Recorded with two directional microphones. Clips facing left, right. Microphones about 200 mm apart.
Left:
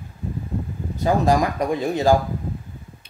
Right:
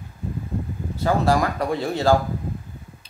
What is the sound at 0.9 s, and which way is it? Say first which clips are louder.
Speech: left 1 dB; 15° left (ahead or behind).